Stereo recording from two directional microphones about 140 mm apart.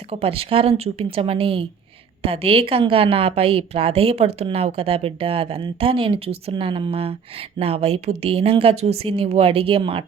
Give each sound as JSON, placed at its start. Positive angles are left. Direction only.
{"t": 0.1, "sound": "a woman's voice", "side_deg": -45}